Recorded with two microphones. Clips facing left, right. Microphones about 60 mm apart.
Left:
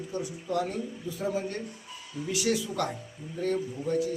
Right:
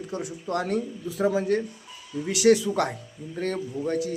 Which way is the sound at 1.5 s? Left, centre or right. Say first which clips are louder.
Right 12 dB; right.